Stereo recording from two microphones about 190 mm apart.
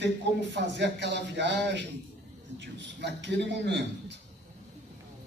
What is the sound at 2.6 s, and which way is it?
A man's voice, 65° right (ahead or behind).